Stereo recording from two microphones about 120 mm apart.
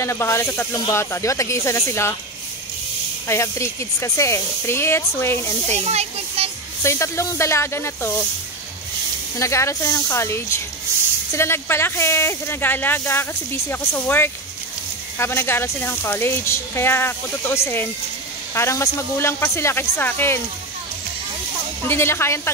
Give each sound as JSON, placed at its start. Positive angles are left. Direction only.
{"t": 0.0, "sound": "speech", "side_deg": 20}
{"t": 3.3, "sound": "speech", "side_deg": 25}
{"t": 5.9, "sound": "a sound", "side_deg": -60}
{"t": 6.8, "sound": "speech", "side_deg": 25}
{"t": 9.4, "sound": "speech", "side_deg": 25}
{"t": 21.8, "sound": "speech", "side_deg": 20}